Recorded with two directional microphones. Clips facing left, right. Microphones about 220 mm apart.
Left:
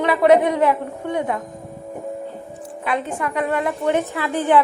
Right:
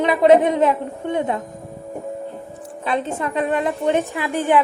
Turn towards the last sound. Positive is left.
turn(degrees=-15)  # may be behind; listen again after turning